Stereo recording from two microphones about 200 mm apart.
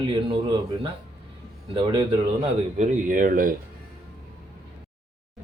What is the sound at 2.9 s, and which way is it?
Speech, 40° right (ahead or behind).